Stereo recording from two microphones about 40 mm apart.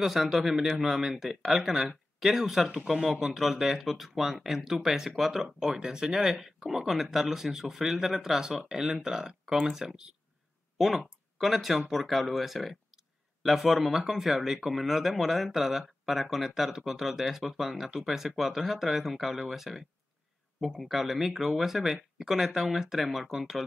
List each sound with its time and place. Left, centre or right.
0.0 s speech: centre
9.6 s speech: centre
20.9 s speech: centre